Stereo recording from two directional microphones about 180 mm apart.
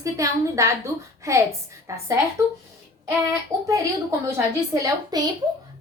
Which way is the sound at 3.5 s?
15° right (ahead or behind).